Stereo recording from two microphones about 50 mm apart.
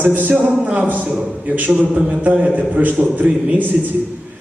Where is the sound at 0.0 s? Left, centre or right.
Right.